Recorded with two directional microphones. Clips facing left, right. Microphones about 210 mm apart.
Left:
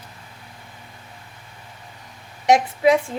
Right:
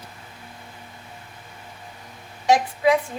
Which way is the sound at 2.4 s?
25° left (ahead or behind).